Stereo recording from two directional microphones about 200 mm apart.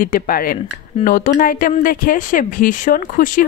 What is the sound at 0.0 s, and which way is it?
Speech, 45° left (ahead or behind).